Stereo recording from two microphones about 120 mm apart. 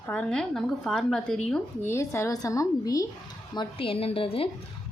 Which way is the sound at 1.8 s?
20° left (ahead or behind).